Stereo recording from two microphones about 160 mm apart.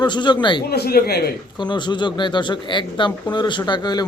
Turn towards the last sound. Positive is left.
turn(degrees=25)  # may be behind; listen again after turning